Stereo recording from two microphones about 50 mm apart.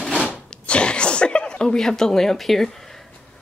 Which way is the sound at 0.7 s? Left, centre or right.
Left.